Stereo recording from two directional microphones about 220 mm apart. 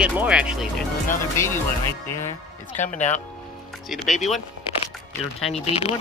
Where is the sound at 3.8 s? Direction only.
Centre (ahead or behind).